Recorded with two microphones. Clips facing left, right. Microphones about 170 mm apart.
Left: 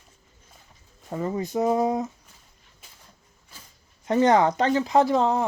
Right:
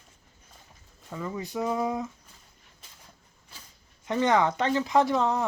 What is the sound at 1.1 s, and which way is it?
Speech, 45° left (ahead or behind).